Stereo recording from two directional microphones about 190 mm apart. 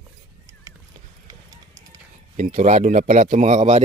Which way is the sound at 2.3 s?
40° right (ahead or behind).